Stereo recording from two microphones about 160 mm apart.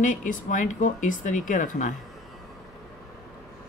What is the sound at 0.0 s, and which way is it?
Speech, 55° left (ahead or behind).